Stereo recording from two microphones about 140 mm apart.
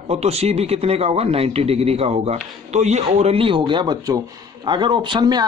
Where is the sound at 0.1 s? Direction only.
50° right (ahead or behind).